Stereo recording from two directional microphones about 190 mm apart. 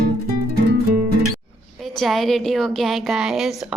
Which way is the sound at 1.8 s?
Centre (ahead or behind).